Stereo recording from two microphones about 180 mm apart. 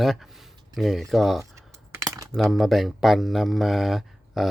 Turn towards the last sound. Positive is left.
turn(degrees=0)  # may be behind; listen again after turning